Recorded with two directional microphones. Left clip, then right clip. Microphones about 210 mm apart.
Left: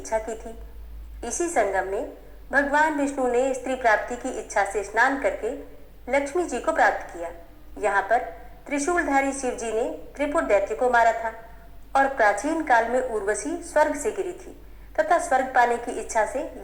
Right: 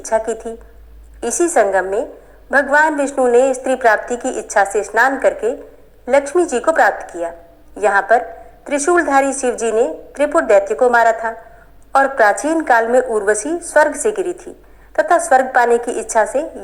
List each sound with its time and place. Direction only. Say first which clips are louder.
0.1 s a woman's voice: right 10 dB; 30° right (ahead or behind)